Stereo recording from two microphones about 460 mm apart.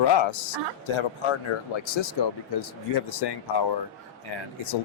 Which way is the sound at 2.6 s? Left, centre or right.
Left.